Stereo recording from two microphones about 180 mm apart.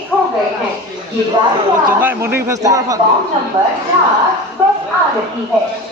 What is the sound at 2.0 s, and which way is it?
Speech, 10° right (ahead or behind).